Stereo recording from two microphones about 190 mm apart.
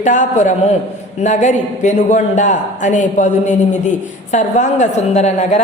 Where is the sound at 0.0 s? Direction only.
40° left (ahead or behind).